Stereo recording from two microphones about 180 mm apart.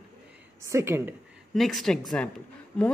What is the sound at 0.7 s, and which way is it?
Speech, 15° right (ahead or behind).